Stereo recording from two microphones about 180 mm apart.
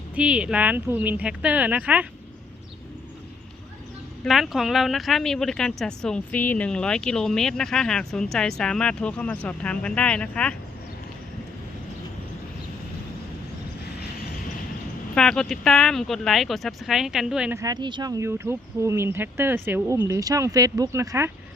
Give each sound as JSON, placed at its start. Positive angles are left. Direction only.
{"t": 0.2, "sound": "speech", "side_deg": -5}
{"t": 4.2, "sound": "speech", "side_deg": 0}
{"t": 15.1, "sound": "speech", "side_deg": 5}
{"t": 17.6, "sound": "speech", "side_deg": -20}